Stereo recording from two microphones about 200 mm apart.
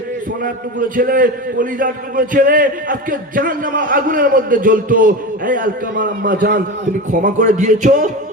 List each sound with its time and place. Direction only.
0.4 s a man's voice: 45° right (ahead or behind)